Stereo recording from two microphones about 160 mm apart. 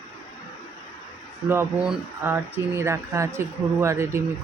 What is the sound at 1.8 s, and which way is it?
Speech, 10° right (ahead or behind).